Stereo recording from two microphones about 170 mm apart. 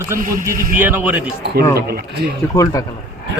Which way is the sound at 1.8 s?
65° right (ahead or behind).